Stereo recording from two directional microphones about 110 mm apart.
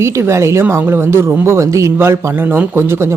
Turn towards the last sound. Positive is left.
turn(degrees=-25)  # may be behind; listen again after turning